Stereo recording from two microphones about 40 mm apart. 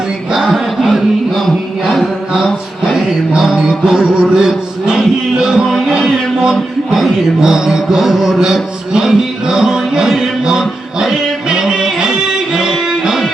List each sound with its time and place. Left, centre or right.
0.3 s music: centre
2.3 s mantra: centre
4.0 s music: right
4.4 s music: centre
7.4 s mantra: centre
8.9 s music: centre